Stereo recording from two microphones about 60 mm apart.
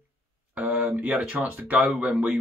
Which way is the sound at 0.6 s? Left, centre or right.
Right.